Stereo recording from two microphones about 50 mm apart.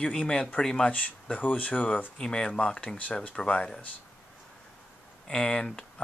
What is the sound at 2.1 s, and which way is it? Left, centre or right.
Speech, centre.